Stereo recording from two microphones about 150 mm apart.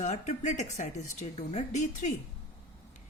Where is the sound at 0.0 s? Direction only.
55° left (ahead or behind).